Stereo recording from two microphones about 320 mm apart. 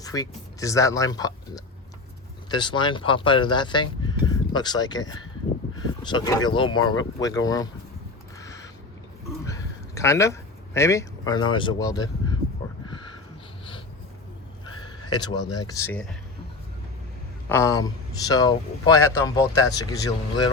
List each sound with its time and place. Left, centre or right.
0.0 s speech: centre
8.4 s a sound: centre
11.4 s speech: centre
15.1 s speech: centre
17.5 s speech: centre